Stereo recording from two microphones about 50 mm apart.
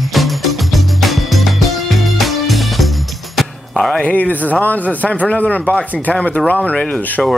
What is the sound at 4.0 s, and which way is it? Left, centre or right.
Speech, left.